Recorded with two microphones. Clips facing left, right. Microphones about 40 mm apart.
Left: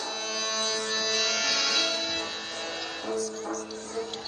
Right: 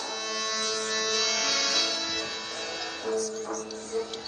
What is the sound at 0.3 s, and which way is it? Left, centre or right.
Music, left.